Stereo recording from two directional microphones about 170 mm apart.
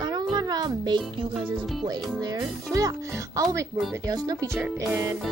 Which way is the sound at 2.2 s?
20° right (ahead or behind).